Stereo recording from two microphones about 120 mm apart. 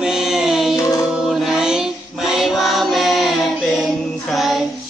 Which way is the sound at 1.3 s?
5° right (ahead or behind).